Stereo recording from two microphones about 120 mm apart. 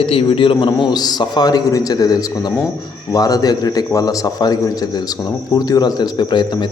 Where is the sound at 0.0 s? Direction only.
50° left (ahead or behind).